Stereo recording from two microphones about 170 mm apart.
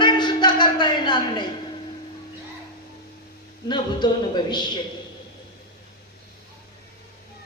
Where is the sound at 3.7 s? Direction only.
25° left (ahead or behind).